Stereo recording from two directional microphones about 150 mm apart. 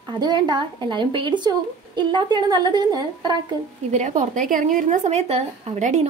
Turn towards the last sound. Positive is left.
turn(degrees=-50)  # may be behind; listen again after turning